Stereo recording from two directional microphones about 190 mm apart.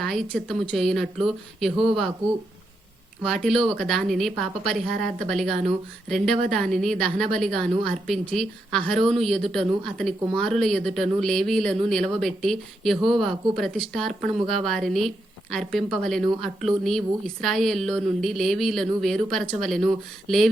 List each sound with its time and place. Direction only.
0.0 s a woman's voice: centre (ahead or behind)
3.2 s a woman's voice: centre (ahead or behind)
4.9 s speech: 50° right (ahead or behind)
5.3 s a woman's voice: centre (ahead or behind)